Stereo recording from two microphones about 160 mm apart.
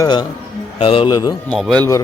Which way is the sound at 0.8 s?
35° left (ahead or behind).